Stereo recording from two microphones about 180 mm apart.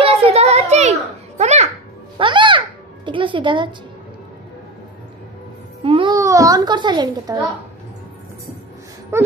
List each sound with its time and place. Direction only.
0.0 s children playing: 35° right (ahead or behind)
1.4 s babbling: 40° right (ahead or behind)
2.1 s music: 25° right (ahead or behind)
3.1 s speech: 25° right (ahead or behind)
5.9 s music: 30° right (ahead or behind)
6.1 s a child's voice: 20° right (ahead or behind)
9.1 s wail: 15° right (ahead or behind)